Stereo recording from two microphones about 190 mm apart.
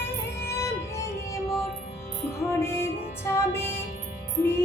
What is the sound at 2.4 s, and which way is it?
Music, 15° left (ahead or behind).